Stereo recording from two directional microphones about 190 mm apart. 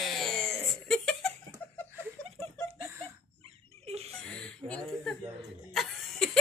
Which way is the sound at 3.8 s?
35° right (ahead or behind).